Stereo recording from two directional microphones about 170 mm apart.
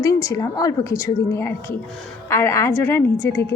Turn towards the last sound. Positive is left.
turn(degrees=15)  # may be behind; listen again after turning